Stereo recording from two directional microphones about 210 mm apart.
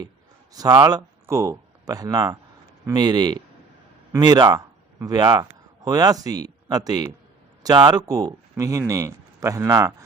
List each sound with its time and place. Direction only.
0.5 s a man's voice: 15° right (ahead or behind)